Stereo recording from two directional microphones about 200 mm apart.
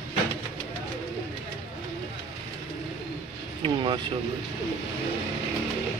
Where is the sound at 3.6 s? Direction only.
25° right (ahead or behind).